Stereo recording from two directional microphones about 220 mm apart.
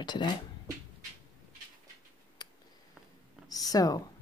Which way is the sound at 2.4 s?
20° left (ahead or behind).